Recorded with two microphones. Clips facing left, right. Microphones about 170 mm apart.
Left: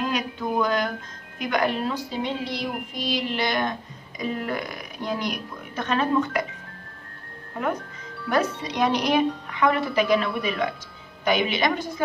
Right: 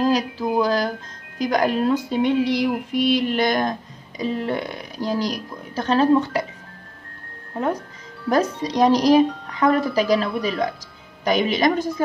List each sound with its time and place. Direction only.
0.0 s a woman's voice: 35° right (ahead or behind)
4.2 s a woman's voice: 30° right (ahead or behind)
8.3 s a woman's voice: 35° right (ahead or behind)